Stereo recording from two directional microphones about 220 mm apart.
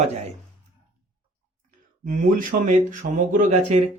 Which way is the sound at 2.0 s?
35° right (ahead or behind).